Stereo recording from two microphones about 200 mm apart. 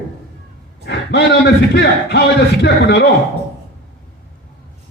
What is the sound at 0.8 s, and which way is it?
A man's voice, 60° left (ahead or behind).